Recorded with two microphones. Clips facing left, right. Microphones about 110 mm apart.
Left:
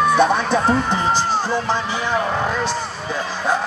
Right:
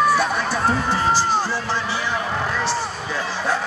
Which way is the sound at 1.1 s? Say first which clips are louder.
Left 1 dB; 20° left (ahead or behind).